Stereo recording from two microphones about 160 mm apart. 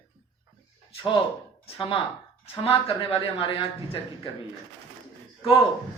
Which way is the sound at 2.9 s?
35° left (ahead or behind).